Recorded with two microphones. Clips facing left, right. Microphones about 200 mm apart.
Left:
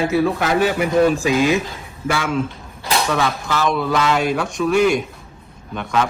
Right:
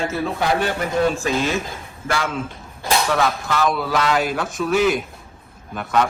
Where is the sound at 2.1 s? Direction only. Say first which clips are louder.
Left 2 dB; centre (ahead or behind).